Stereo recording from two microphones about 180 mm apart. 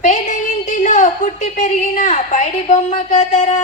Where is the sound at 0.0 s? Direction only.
45° left (ahead or behind).